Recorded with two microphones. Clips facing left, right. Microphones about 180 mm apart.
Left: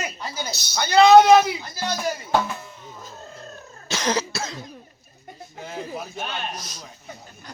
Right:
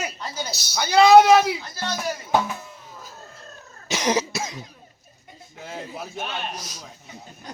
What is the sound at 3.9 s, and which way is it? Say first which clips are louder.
Cough: right 2 dB; 15° right (ahead or behind).